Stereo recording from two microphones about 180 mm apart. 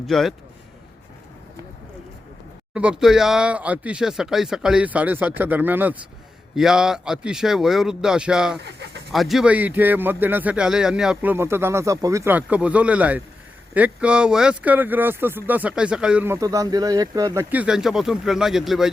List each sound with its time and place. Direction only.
0.1 s speech: centre (ahead or behind)
2.7 s speech: 5° right (ahead or behind)
8.5 s speech: 70° right (ahead or behind)
9.1 s a man's voice: centre (ahead or behind); by 17.4 s 20° right (ahead or behind)
17.5 s speech: 5° right (ahead or behind)